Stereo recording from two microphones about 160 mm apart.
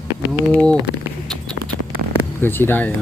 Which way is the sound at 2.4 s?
15° left (ahead or behind).